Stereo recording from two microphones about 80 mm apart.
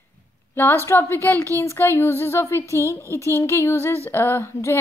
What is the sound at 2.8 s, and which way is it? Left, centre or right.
Speech, right.